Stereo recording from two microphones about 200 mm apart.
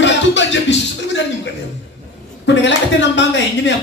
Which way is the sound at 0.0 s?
65° left (ahead or behind).